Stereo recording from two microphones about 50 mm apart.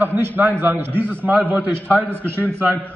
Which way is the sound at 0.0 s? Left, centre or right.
Right.